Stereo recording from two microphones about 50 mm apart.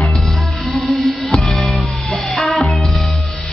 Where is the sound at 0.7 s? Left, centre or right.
Centre.